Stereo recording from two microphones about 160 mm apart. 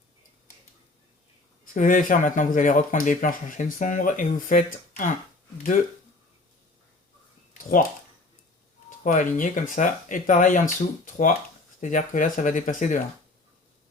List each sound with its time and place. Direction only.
1.7 s speech: 55° left (ahead or behind)
7.6 s speech: 60° left (ahead or behind)
8.9 s speech: 55° left (ahead or behind)